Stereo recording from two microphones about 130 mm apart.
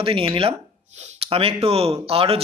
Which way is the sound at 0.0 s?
45° right (ahead or behind).